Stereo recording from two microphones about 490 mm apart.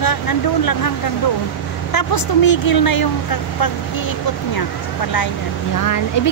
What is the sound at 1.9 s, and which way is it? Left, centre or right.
Speech, left.